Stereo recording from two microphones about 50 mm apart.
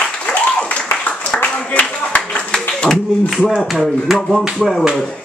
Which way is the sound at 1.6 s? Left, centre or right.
Left.